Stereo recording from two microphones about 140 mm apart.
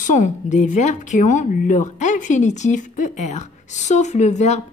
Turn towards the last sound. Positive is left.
turn(degrees=55)  # may be behind; listen again after turning